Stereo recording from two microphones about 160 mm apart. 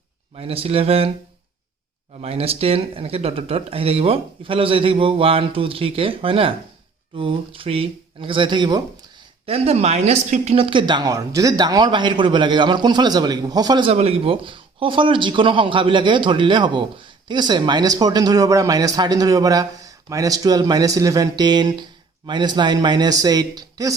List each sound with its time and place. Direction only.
0.3 s speech: 35° right (ahead or behind)
2.2 s speech: 40° right (ahead or behind)
9.5 s a man's voice: 40° right (ahead or behind)
13.9 s a man's voice: 40° right (ahead or behind); by 23.9 s 25° right (ahead or behind)